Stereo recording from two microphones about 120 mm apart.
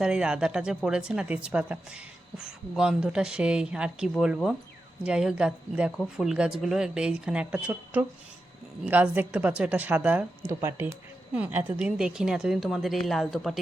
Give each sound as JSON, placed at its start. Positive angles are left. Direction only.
{"t": 0.0, "sound": "a woman's voice", "side_deg": -5}
{"t": 10.6, "sound": "a woman's voice", "side_deg": -20}